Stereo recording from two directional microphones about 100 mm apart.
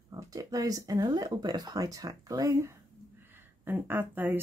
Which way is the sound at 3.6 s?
20° right (ahead or behind).